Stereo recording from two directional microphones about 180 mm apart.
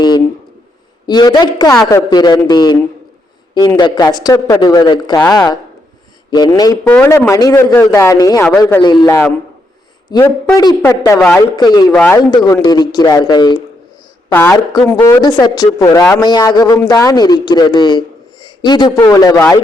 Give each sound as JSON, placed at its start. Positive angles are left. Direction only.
{"t": 1.0, "sound": "speech", "side_deg": 25}
{"t": 3.8, "sound": "speech", "side_deg": 20}
{"t": 6.8, "sound": "a man's voice", "side_deg": 10}
{"t": 8.8, "sound": "speech", "side_deg": 25}
{"t": 9.0, "sound": "a man's voice", "side_deg": 15}
{"t": 11.9, "sound": "a man's voice", "side_deg": 10}
{"t": 12.3, "sound": "a man's voice", "side_deg": 20}
{"t": 15.2, "sound": "a man's voice", "side_deg": 20}